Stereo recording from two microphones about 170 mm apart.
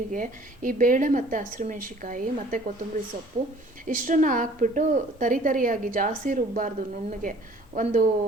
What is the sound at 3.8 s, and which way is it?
A woman's voice, 50° right (ahead or behind).